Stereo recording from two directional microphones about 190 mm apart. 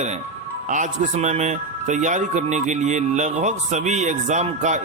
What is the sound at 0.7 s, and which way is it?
Speech, 40° right (ahead or behind).